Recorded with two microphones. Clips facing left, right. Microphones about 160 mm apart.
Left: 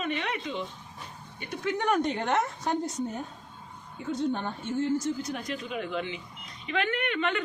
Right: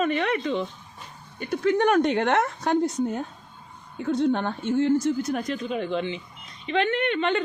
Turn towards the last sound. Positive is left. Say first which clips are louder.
# right 5 dB
turn(degrees=-30)  # may be behind; listen again after turning